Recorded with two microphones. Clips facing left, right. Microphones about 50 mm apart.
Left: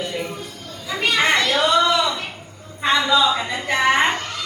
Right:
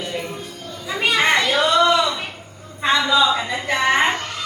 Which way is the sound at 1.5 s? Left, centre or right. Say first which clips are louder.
Right 1 dB; centre.